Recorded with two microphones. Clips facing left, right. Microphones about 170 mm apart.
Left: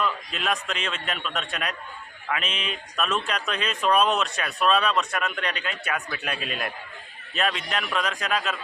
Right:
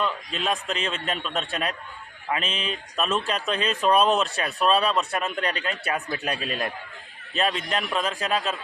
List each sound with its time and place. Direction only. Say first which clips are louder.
0.0 s a man's voice: right 1 dB; 30° right (ahead or behind)